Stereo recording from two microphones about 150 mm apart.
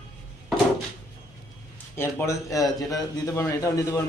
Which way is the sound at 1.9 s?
15° left (ahead or behind).